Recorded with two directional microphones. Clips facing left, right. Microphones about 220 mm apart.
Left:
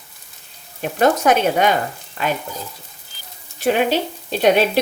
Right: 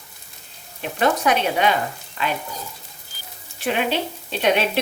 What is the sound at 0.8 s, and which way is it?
Speech, 45° left (ahead or behind).